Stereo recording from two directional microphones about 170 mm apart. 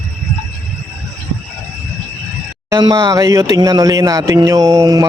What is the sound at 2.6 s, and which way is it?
Speech, 25° right (ahead or behind).